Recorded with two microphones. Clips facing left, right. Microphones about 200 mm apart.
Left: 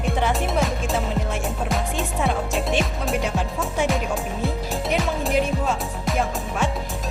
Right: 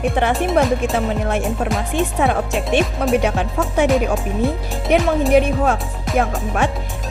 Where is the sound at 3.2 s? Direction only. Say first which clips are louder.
Right 6 dB; 65° right (ahead or behind).